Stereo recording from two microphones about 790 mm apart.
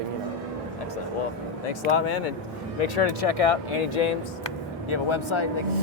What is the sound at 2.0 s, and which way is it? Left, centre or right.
Speech, left.